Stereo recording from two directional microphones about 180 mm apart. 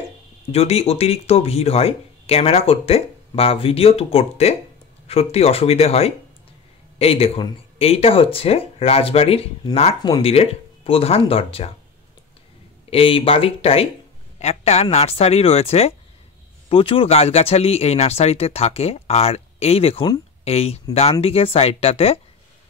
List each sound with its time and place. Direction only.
0.5 s speech: 35° left (ahead or behind)
12.9 s speech: 30° left (ahead or behind)